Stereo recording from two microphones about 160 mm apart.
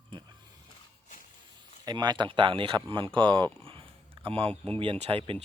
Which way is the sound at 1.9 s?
25° right (ahead or behind).